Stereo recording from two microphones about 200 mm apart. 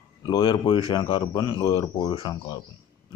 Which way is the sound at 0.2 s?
20° left (ahead or behind).